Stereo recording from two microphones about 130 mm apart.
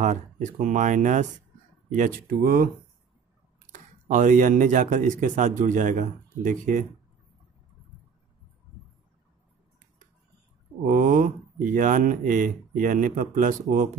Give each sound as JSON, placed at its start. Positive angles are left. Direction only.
{"t": 0.0, "sound": "speech", "side_deg": -70}
{"t": 1.9, "sound": "speech", "side_deg": -90}
{"t": 3.7, "sound": "speech", "side_deg": -80}
{"t": 10.9, "sound": "speech", "side_deg": -90}